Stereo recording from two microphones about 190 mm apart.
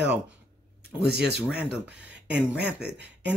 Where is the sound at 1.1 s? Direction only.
60° right (ahead or behind).